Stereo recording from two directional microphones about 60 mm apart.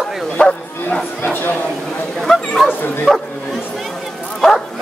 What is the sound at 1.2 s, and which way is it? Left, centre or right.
Speech, left.